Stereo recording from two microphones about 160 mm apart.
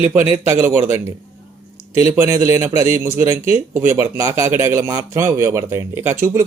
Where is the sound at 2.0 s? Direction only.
15° right (ahead or behind).